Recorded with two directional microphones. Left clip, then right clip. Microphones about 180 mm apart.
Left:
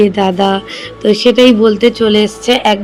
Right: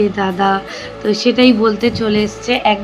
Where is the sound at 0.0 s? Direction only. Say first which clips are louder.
Left 4 dB; 30° left (ahead or behind).